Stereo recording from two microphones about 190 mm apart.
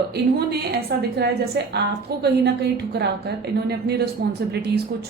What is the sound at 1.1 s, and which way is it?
A woman's voice, 60° right (ahead or behind).